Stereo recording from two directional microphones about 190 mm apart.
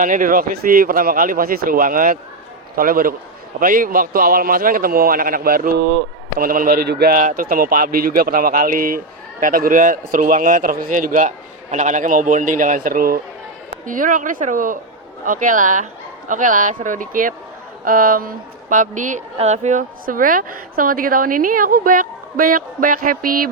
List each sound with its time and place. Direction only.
0.0 s a woman's voice: 45° right (ahead or behind)